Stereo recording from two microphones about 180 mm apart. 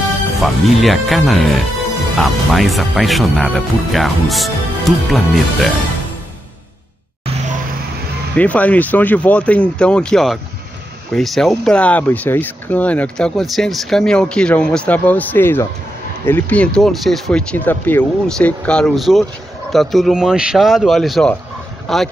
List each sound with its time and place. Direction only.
0.4 s speech: centre (ahead or behind)
8.4 s speech: 10° left (ahead or behind)